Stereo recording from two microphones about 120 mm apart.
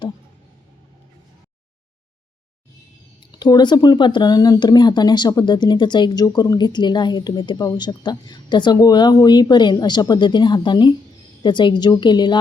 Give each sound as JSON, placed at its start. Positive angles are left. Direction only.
{"t": 3.3, "sound": "speech", "side_deg": 35}